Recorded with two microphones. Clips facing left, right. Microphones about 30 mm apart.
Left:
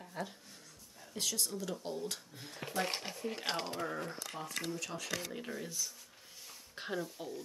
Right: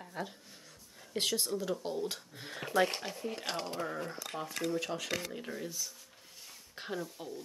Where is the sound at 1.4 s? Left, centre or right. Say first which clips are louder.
Right 4 dB; right.